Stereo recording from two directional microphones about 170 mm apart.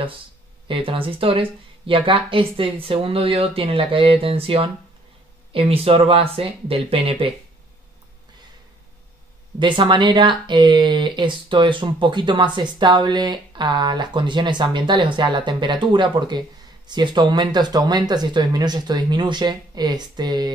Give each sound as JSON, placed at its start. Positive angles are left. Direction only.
{"t": 0.7, "sound": "speech", "side_deg": -30}
{"t": 9.6, "sound": "speech", "side_deg": -25}